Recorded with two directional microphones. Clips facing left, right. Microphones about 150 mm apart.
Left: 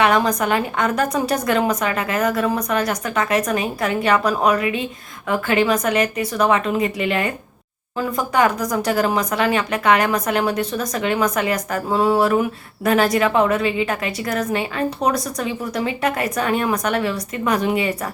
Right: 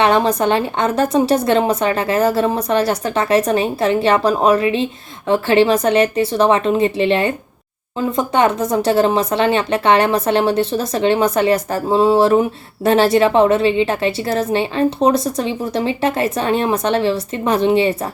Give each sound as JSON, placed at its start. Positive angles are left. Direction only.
{"t": 0.0, "sound": "speech", "side_deg": -30}